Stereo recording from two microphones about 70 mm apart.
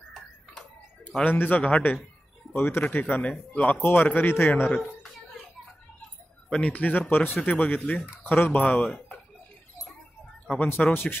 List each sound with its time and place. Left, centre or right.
1.2 s speech: left
2.5 s speech: left; by 3.8 s centre
3.8 s speech: left
6.5 s speech: centre
8.8 s speech: centre
10.4 s speech: centre
10.7 s speech: left